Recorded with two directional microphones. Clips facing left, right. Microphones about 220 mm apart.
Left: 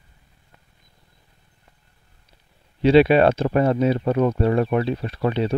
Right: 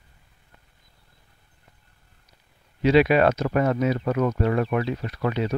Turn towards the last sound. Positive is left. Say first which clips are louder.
# left 3 dB
turn(degrees=30)  # may be behind; listen again after turning